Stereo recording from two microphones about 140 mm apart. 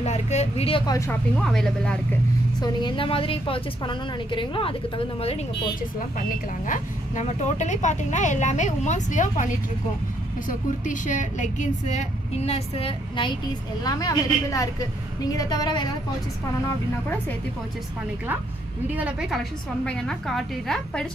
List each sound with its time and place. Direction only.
0.0 s speech: 50° left (ahead or behind)
0.8 s a woman's voice: 20° left (ahead or behind)
1.3 s a woman's voice: 5° left (ahead or behind)
2.6 s a woman's voice: 35° left (ahead or behind)
5.8 s speech: 75° left (ahead or behind); by 13.4 s 35° left (ahead or behind)
13.8 s a woman's voice: 25° left (ahead or behind)
16.6 s speech: 15° left (ahead or behind)
18.9 s a woman's voice: 5° right (ahead or behind)